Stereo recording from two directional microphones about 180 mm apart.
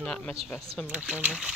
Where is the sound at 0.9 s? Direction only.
5° right (ahead or behind).